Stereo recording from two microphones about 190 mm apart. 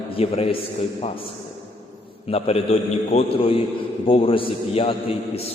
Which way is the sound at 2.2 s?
30° left (ahead or behind).